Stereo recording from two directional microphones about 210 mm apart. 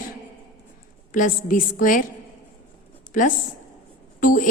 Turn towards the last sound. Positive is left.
turn(degrees=40)  # may be behind; listen again after turning